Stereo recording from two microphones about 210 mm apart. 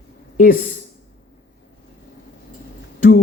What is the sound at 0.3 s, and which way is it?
Speech, 40° left (ahead or behind).